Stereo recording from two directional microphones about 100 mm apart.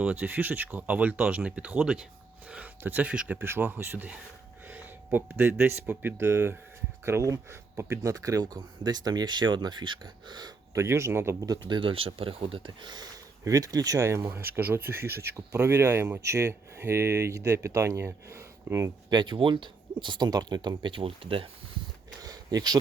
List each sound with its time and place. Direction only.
0.0 s speech: 15° right (ahead or behind); by 10.5 s 45° right (ahead or behind)
10.8 s speech: 30° right (ahead or behind)
11.7 s speech: 60° right (ahead or behind); by 18.9 s 30° right (ahead or behind)
19.1 s speech: 55° right (ahead or behind)
22.2 s a sound: 40° right (ahead or behind)